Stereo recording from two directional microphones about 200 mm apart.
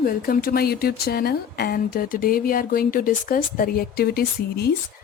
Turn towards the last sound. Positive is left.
turn(degrees=50)  # may be behind; listen again after turning